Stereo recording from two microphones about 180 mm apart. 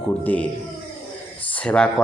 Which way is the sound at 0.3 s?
10° left (ahead or behind).